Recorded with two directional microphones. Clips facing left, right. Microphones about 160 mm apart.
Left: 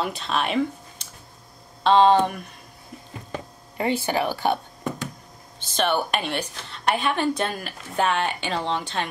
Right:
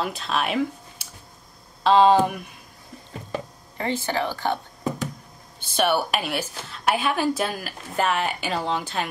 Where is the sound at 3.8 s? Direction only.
15° left (ahead or behind).